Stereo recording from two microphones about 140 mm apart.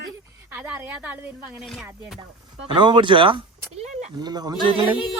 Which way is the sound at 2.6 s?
35° right (ahead or behind).